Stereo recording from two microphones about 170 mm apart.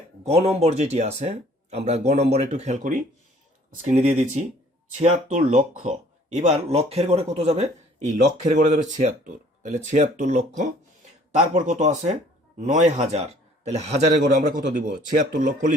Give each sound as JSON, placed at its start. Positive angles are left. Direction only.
{"t": 0.3, "sound": "speech", "side_deg": -35}